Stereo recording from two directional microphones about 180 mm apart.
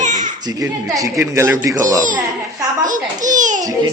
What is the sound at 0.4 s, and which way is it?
A man's voice, 20° right (ahead or behind).